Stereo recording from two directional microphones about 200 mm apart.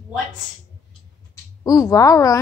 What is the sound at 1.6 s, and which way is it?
Speech, 20° left (ahead or behind).